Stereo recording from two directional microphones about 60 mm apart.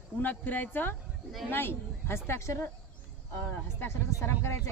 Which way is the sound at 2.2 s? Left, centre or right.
Left.